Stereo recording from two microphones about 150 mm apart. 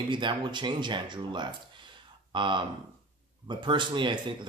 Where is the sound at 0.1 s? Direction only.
30° right (ahead or behind).